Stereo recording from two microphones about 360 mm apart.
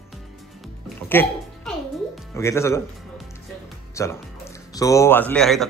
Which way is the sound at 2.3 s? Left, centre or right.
Centre.